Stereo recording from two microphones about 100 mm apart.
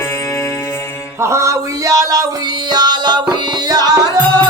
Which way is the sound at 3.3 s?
45° right (ahead or behind).